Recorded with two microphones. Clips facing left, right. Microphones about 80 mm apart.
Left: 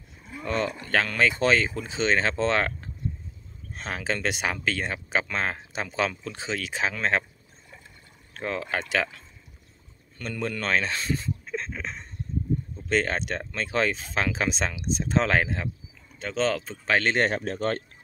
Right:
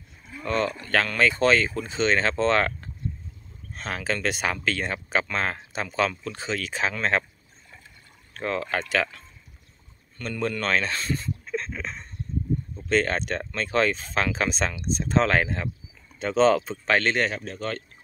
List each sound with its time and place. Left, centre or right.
0.3 s speech: centre
8.3 s speech: centre
10.1 s speech: centre
16.2 s speech: centre
16.8 s speech: centre
17.3 s speech: left